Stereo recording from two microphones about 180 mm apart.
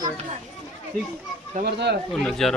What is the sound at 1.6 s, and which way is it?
Speech, 70° right (ahead or behind).